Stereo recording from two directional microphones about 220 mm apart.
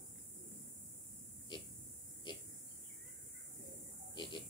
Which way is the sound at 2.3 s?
20° left (ahead or behind).